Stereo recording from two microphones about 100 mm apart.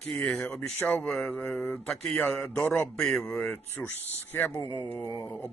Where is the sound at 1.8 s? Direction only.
5° left (ahead or behind).